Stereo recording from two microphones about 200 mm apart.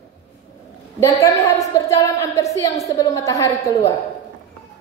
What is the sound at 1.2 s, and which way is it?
A woman's voice, 15° left (ahead or behind).